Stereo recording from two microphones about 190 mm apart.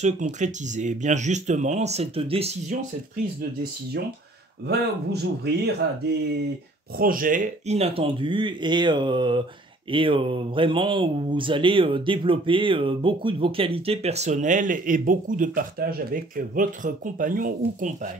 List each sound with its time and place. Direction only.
0.0 s speech: 40° right (ahead or behind)
4.6 s a man's voice: 60° right (ahead or behind)
7.0 s speech: 50° right (ahead or behind)